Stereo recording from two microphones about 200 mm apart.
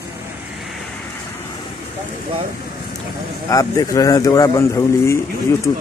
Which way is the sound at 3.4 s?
15° left (ahead or behind).